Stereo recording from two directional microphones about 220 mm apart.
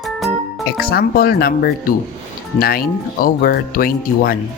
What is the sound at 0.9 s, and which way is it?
Speech, 45° left (ahead or behind).